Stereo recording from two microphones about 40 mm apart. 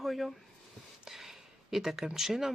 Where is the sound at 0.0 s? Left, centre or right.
Centre.